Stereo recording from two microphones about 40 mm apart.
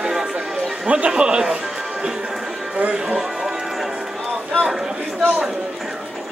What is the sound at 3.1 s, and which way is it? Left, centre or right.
Music, centre.